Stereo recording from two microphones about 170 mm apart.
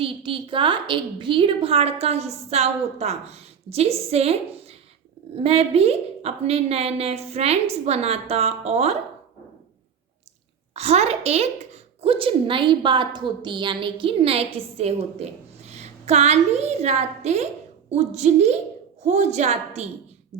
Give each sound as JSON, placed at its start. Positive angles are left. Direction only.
{"t": 0.0, "sound": "a woman's voice", "side_deg": -30}
{"t": 10.8, "sound": "a woman's voice", "side_deg": -40}